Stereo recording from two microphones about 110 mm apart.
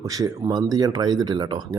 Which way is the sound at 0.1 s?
35° right (ahead or behind).